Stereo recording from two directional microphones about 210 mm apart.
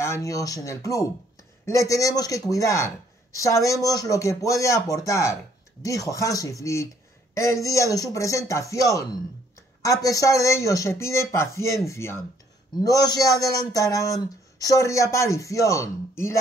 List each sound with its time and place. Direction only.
0.0 s speech: 15° left (ahead or behind)